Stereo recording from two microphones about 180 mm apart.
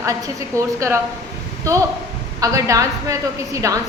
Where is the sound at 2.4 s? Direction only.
20° right (ahead or behind).